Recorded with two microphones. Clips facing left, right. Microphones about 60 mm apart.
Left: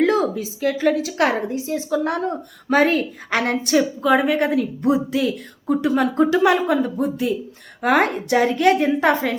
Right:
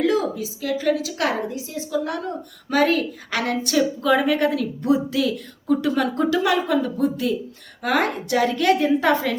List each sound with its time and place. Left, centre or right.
0.0 s a woman's voice: left